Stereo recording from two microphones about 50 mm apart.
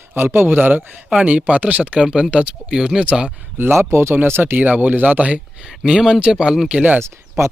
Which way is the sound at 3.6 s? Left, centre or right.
Right.